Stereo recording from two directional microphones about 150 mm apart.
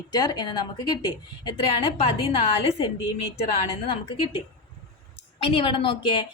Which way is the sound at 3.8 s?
35° left (ahead or behind).